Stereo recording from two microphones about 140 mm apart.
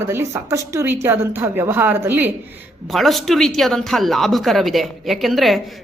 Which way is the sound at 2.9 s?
Centre (ahead or behind).